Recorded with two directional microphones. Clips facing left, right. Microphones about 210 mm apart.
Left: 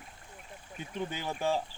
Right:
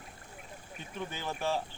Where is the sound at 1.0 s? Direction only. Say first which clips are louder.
Left 2 dB; 15° left (ahead or behind).